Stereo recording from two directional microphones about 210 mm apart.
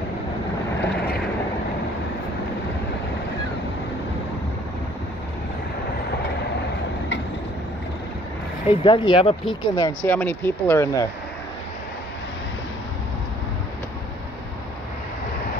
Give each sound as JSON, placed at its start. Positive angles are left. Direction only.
{"t": 8.6, "sound": "speech", "side_deg": 25}
{"t": 10.0, "sound": "speech", "side_deg": 10}